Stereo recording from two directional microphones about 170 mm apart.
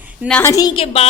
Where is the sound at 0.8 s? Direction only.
35° left (ahead or behind).